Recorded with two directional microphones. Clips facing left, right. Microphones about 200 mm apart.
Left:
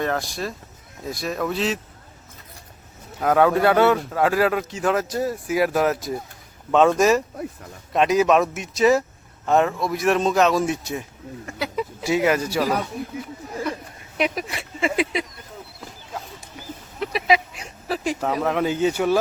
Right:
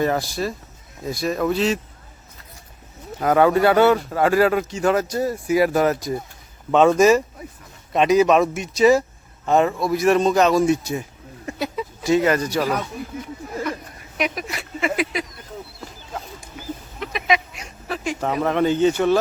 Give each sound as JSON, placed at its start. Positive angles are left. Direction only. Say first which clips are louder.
{"t": 0.0, "sound": "speech", "louder": "right 4 dB", "side_deg": -5}
{"t": 3.2, "sound": "speech", "louder": "right 1 dB", "side_deg": 0}
{"t": 12.0, "sound": "speech", "louder": "right 3 dB", "side_deg": 10}
{"t": 14.2, "sound": "speech", "louder": "left 1 dB", "side_deg": 30}
{"t": 17.0, "sound": "a sound", "louder": "left 2 dB", "side_deg": 35}
{"t": 18.2, "sound": "speech", "louder": "right 4 dB", "side_deg": 0}